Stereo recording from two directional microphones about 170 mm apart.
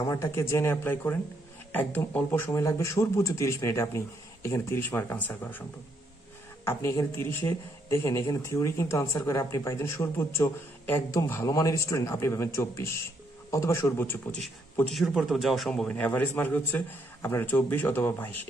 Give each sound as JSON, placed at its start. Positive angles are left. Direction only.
{"t": 0.0, "sound": "speech", "side_deg": 15}
{"t": 6.6, "sound": "speech", "side_deg": 15}
{"t": 14.8, "sound": "speech", "side_deg": 0}